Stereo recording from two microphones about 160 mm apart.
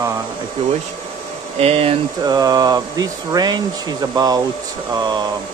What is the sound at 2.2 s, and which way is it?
Speech, 25° right (ahead or behind).